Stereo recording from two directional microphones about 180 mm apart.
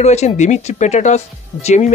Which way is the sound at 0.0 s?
40° left (ahead or behind).